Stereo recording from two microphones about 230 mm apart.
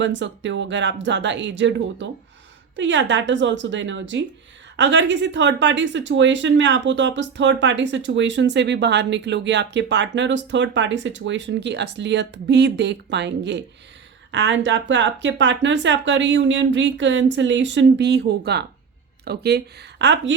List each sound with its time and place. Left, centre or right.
0.0 s speech: right